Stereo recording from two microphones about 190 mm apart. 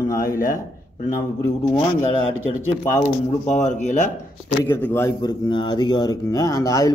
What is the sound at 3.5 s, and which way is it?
Speech, 40° left (ahead or behind).